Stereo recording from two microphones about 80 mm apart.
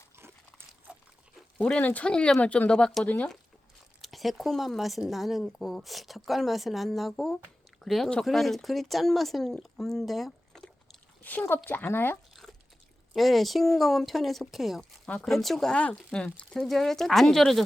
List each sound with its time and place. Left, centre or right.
1.6 s speech: centre
4.0 s speech: centre
11.2 s speech: left
13.1 s speech: centre
14.8 s speech: centre